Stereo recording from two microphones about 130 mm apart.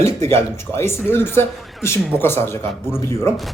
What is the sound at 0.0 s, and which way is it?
A man's voice, 20° left (ahead or behind).